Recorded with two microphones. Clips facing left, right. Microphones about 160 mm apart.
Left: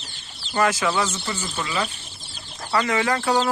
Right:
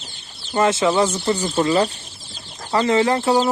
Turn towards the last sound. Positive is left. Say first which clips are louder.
# right 5 dB
turn(degrees=-25)  # may be behind; listen again after turning